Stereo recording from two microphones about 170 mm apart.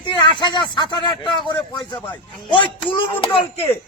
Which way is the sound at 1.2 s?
25° left (ahead or behind).